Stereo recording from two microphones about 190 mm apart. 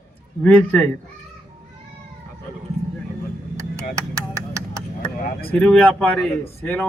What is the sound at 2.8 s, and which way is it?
Vehicle, 15° left (ahead or behind).